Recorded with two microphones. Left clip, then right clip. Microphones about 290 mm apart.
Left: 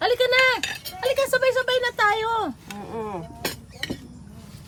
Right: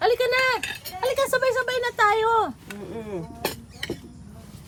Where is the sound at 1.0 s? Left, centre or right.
Centre.